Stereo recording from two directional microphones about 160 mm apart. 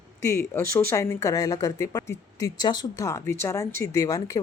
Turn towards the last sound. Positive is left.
turn(degrees=20)  # may be behind; listen again after turning